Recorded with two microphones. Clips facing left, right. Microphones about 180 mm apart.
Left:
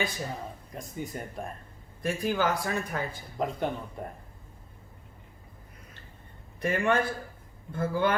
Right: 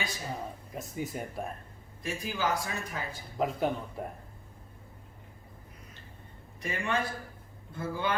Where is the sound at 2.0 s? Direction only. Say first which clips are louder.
Left 6 dB; 55° left (ahead or behind).